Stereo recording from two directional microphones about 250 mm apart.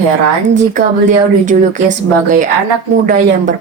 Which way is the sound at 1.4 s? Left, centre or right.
Right.